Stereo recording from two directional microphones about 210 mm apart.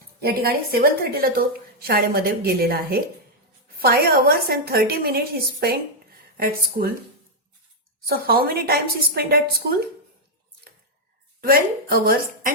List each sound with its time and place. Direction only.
0.2 s a woman's voice: 45° right (ahead or behind)
8.0 s a woman's voice: 45° right (ahead or behind)
11.3 s a woman's voice: 45° right (ahead or behind)